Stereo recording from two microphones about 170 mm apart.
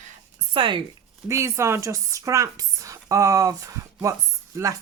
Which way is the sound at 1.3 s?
15° right (ahead or behind).